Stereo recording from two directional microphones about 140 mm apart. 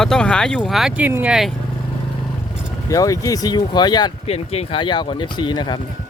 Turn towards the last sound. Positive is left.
turn(degrees=30)  # may be behind; listen again after turning